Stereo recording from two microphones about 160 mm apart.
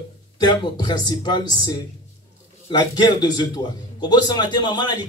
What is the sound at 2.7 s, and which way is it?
A man's voice, 25° left (ahead or behind).